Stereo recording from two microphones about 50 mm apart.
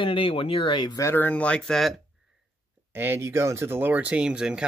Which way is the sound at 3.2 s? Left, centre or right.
Right.